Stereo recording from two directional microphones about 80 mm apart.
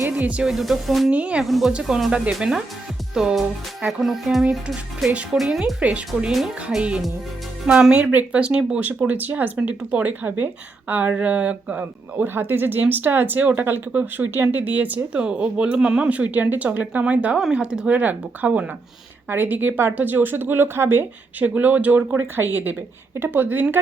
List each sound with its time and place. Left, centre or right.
0.1 s music: centre
0.5 s speech: centre
1.1 s speech: centre
1.5 s speech: centre; by 23.6 s right